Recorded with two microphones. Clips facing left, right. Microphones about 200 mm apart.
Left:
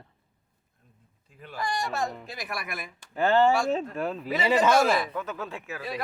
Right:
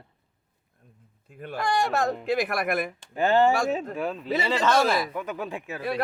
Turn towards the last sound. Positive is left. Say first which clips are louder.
# right 3 dB
turn(degrees=-15)  # may be behind; listen again after turning